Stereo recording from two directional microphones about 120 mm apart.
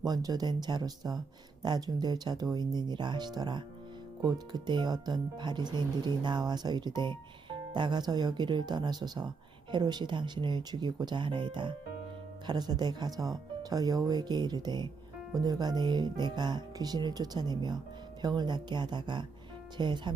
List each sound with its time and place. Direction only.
0.0 s speech: 30° right (ahead or behind)